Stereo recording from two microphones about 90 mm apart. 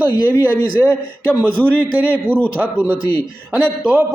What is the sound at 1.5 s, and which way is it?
Speech, 15° left (ahead or behind).